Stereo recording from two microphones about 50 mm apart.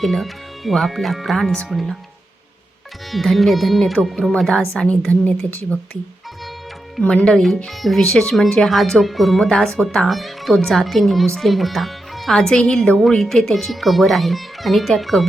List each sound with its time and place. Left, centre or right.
0.0 s speech: centre
3.1 s speech: centre
4.3 s a woman's voice: centre
7.1 s speech: centre
7.7 s speech: centre
8.0 s a woman's voice: centre
9.4 s a woman's voice: centre
10.1 s speech: centre
12.4 s a woman's voice: centre